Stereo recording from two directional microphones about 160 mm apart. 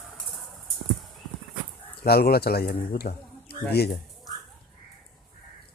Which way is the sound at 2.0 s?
75° left (ahead or behind).